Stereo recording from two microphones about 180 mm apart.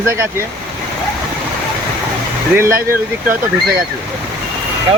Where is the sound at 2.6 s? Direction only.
15° right (ahead or behind).